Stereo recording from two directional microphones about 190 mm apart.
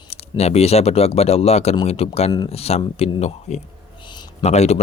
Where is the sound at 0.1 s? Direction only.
35° left (ahead or behind).